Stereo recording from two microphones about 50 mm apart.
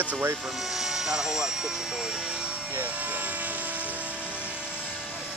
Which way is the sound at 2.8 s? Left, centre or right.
Right.